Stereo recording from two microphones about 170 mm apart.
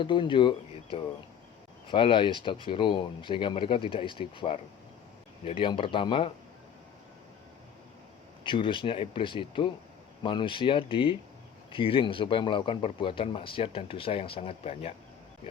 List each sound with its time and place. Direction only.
0.0 s speech: 30° left (ahead or behind)
8.4 s speech: 30° left (ahead or behind)